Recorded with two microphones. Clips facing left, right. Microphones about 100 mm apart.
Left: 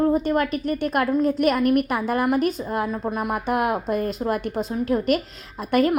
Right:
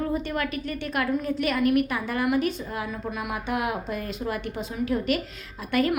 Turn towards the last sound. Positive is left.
turn(degrees=50)  # may be behind; listen again after turning